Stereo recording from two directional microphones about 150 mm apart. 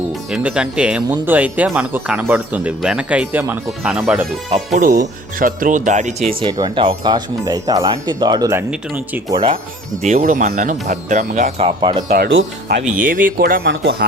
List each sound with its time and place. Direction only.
0.3 s speech: 5° right (ahead or behind)
4.5 s speech: 60° right (ahead or behind)
6.4 s speech: 30° right (ahead or behind)
9.3 s speech: 35° right (ahead or behind)
10.2 s speech: 60° right (ahead or behind); by 12.0 s 30° right (ahead or behind)
12.1 s speech: 80° right
12.8 s speech: 65° right (ahead or behind)
14.0 s speech: 90° right